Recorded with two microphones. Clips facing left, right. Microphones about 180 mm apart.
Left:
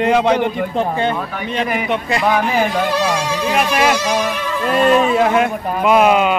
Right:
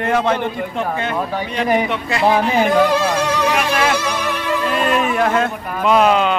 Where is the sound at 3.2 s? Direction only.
70° right (ahead or behind).